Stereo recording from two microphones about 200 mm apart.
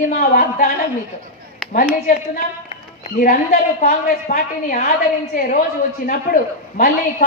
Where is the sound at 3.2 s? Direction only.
45° left (ahead or behind).